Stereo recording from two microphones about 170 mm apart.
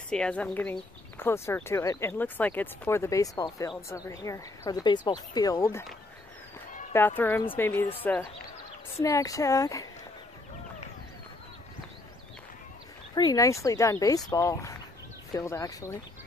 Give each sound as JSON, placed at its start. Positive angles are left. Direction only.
{"t": 0.1, "sound": "speech", "side_deg": 5}
{"t": 6.9, "sound": "speech", "side_deg": 10}
{"t": 13.1, "sound": "speech", "side_deg": 20}